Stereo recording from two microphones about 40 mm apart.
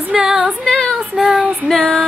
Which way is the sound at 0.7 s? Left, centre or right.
Centre.